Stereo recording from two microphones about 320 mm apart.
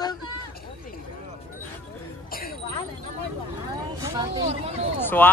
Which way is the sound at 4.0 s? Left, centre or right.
Centre.